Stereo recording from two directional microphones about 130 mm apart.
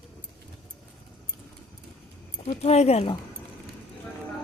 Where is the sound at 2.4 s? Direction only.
55° left (ahead or behind).